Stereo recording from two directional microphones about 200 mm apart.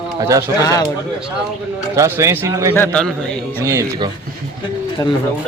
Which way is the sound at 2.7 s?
5° left (ahead or behind).